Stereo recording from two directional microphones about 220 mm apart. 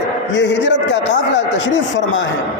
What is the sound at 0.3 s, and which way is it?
A man's voice, 55° left (ahead or behind).